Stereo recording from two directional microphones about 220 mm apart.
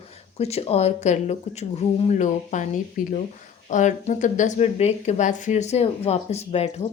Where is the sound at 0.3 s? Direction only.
30° left (ahead or behind).